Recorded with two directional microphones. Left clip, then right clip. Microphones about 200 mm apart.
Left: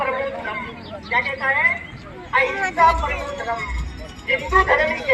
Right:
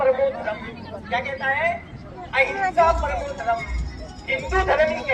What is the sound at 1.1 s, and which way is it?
Speech, 35° right (ahead or behind).